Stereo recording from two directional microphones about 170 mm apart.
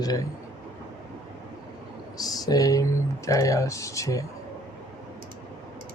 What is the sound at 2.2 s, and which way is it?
Speech, 20° left (ahead or behind).